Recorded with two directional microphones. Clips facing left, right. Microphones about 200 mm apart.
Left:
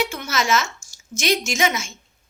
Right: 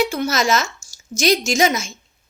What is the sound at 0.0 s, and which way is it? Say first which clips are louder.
A woman's voice: right 5 dB; 35° right (ahead or behind).